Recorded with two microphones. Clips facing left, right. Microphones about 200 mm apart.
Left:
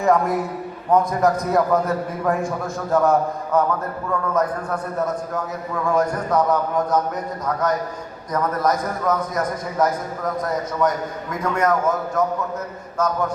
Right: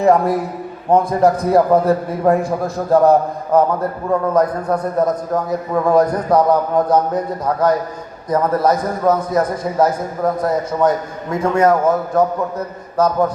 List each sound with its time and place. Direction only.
0.0 s a man's voice: 30° right (ahead or behind)